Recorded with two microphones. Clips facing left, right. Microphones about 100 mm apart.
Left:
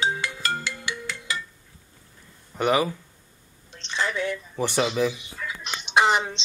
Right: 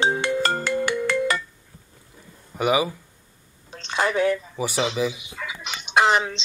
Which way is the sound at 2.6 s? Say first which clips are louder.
Right 1 dB; 5° right (ahead or behind).